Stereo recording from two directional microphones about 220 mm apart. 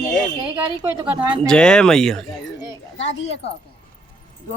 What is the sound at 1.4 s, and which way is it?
Speech, 5° left (ahead or behind).